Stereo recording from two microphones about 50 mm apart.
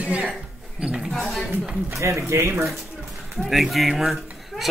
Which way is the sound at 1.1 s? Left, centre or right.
Centre.